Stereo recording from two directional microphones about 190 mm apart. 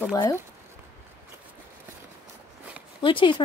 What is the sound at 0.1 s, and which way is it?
Speech, 20° left (ahead or behind).